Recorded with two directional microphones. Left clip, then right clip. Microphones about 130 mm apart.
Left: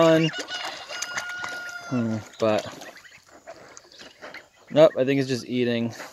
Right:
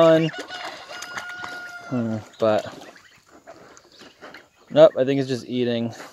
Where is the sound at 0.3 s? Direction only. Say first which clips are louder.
Left 1 dB; 35° left (ahead or behind).